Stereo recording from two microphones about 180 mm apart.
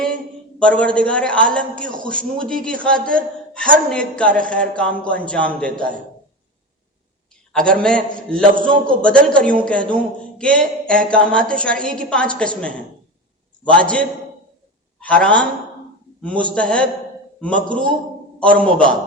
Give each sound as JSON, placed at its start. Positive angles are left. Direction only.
{"t": 0.6, "sound": "a woman's voice", "side_deg": 5}
{"t": 7.8, "sound": "a woman's voice", "side_deg": 5}